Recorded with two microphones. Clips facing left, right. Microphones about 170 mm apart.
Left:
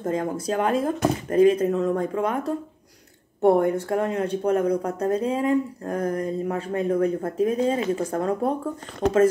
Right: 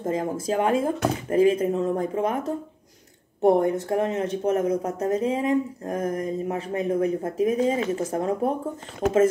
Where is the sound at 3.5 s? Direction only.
20° right (ahead or behind).